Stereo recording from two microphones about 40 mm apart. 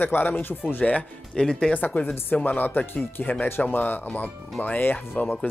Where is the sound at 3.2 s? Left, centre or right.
Left.